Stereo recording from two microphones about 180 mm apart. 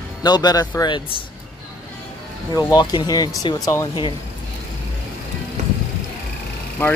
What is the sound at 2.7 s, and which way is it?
Speech, 25° left (ahead or behind).